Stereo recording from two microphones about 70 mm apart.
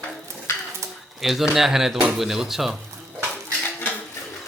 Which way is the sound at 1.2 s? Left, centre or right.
Centre.